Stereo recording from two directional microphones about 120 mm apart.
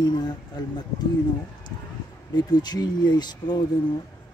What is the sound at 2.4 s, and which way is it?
Speech, 35° left (ahead or behind).